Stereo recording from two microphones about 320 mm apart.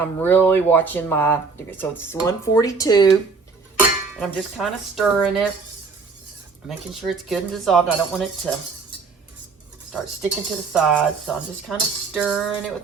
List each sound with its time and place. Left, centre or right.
0.0 s speech: centre
3.8 s speech: centre
6.7 s dishes: centre
9.9 s dishes: centre